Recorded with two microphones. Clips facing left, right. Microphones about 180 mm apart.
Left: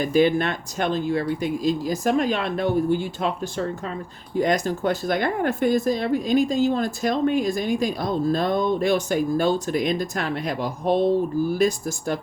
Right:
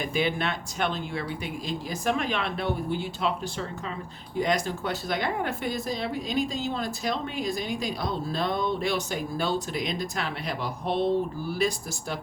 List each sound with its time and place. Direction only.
0.0 s speech: 45° left (ahead or behind)